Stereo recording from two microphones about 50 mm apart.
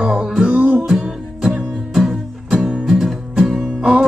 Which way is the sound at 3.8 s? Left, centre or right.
Centre.